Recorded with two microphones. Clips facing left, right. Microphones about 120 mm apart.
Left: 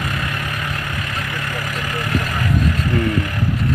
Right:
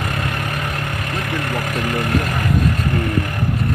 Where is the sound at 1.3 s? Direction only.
55° right (ahead or behind).